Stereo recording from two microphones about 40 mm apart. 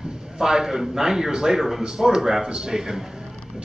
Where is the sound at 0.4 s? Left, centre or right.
Centre.